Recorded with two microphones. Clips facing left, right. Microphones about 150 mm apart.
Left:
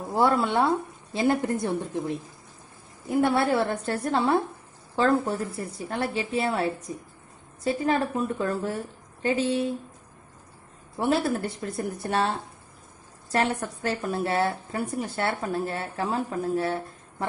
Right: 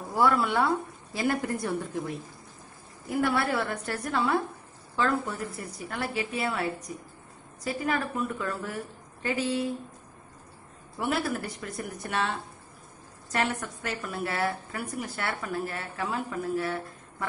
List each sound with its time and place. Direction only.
0.1 s a woman's voice: 25° left (ahead or behind)
11.0 s a woman's voice: 30° left (ahead or behind)